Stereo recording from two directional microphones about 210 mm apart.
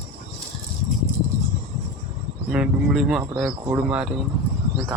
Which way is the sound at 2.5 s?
Centre (ahead or behind).